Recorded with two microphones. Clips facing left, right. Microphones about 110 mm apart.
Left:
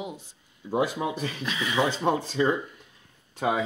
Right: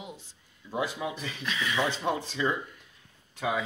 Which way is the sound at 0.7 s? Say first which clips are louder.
Left 6 dB; 50° left (ahead or behind).